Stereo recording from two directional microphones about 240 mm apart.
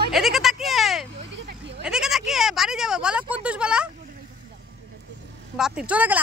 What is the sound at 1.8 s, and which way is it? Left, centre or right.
Bleat, centre.